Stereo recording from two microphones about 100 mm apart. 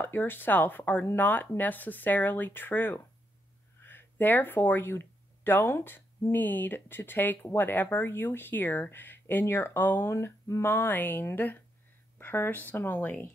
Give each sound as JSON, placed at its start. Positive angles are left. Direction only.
{"t": 0.0, "sound": "speech", "side_deg": 20}